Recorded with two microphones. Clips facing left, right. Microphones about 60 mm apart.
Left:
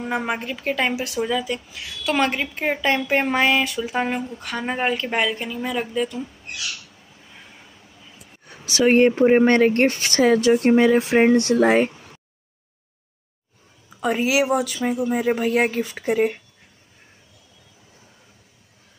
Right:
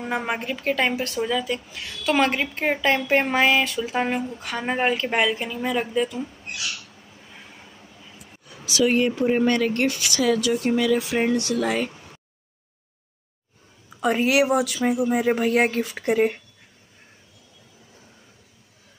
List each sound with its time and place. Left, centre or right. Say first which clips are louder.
0.0 s a woman's voice: left 1 dB; centre
7.2 s vehicle: even; centre
8.6 s speech: left 5 dB; left
11.9 s a sound: even; centre
13.9 s a woman's voice: even; centre